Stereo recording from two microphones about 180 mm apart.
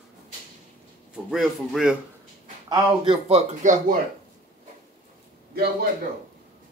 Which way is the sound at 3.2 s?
40° right (ahead or behind).